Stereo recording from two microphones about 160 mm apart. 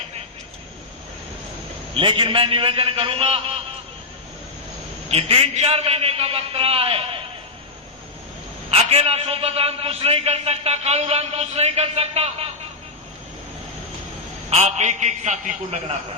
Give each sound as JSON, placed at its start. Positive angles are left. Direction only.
{"t": 1.9, "sound": "a man's voice", "side_deg": -30}
{"t": 5.0, "sound": "a man's voice", "side_deg": -40}
{"t": 8.7, "sound": "a man's voice", "side_deg": -40}
{"t": 14.5, "sound": "a man's voice", "side_deg": -45}